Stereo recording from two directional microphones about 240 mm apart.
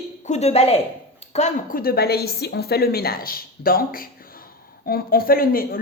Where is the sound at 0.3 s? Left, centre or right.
Left.